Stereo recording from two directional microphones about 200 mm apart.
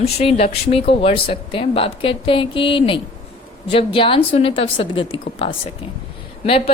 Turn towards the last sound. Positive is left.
turn(degrees=30)  # may be behind; listen again after turning